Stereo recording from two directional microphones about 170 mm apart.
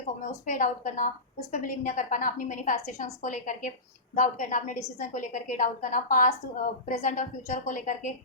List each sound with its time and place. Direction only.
0.4 s a woman's voice: 50° left (ahead or behind)